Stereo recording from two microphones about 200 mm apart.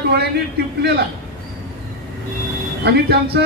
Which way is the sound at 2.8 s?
55° right (ahead or behind).